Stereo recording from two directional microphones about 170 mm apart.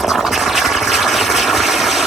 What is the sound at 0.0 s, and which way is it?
Water, centre (ahead or behind).